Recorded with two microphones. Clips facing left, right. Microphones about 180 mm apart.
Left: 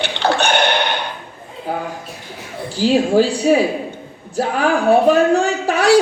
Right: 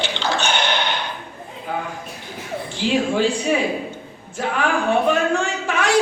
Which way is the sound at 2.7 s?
35° left (ahead or behind).